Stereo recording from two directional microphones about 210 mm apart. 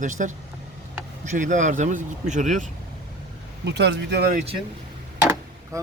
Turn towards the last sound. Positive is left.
turn(degrees=-15)  # may be behind; listen again after turning